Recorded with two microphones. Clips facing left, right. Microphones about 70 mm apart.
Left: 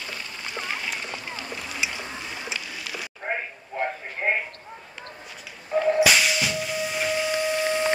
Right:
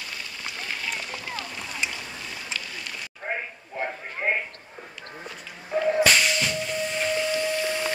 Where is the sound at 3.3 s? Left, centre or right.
Centre.